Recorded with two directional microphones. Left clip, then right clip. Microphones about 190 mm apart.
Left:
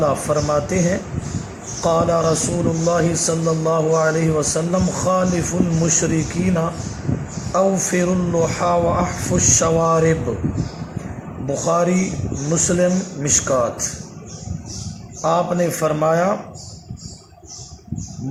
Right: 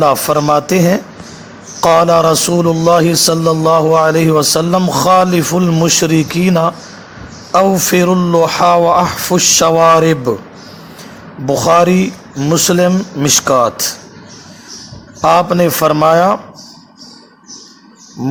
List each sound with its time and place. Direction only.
0.0 s a man's voice: 35° right (ahead or behind)
11.4 s a man's voice: 35° right (ahead or behind)
15.2 s a man's voice: 35° right (ahead or behind)